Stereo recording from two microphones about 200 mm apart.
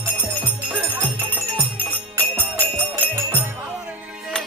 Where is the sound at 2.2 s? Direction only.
10° left (ahead or behind).